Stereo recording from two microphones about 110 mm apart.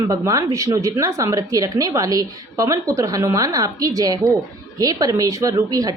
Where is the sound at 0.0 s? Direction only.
30° right (ahead or behind).